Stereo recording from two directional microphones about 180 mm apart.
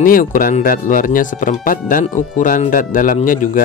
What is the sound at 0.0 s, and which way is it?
Speech, 50° left (ahead or behind).